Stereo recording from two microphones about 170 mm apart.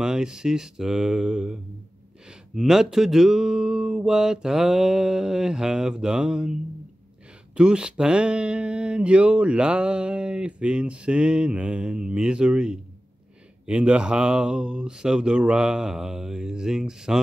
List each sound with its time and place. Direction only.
0.0 s speech: 5° right (ahead or behind)
7.5 s speech: 5° right (ahead or behind)